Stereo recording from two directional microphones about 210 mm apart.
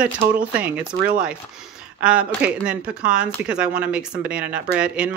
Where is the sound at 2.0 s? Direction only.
5° right (ahead or behind).